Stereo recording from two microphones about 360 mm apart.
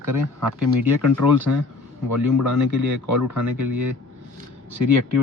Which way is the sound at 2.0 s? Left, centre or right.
Right.